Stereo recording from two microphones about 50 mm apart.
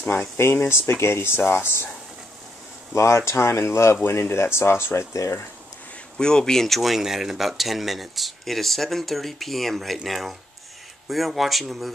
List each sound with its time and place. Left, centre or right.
0.4 s speech: left
2.9 s speech: left
4.0 s speech: left
5.1 s speech: left
6.1 s speech: centre